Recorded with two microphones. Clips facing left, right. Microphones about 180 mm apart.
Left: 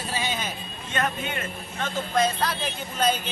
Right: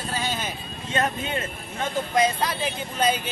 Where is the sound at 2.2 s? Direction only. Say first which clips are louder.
Right 2 dB; 10° right (ahead or behind).